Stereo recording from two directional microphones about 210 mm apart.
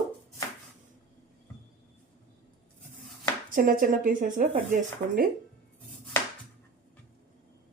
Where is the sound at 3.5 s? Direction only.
40° right (ahead or behind).